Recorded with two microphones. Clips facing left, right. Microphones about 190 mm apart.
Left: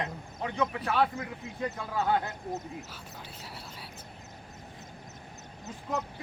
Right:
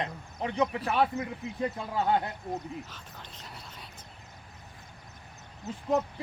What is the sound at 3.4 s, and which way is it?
Whispering, 5° left (ahead or behind).